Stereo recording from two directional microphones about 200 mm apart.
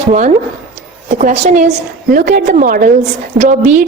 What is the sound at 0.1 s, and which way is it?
A woman's voice, 35° right (ahead or behind).